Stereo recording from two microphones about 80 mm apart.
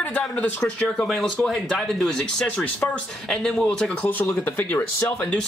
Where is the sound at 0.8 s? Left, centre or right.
Centre.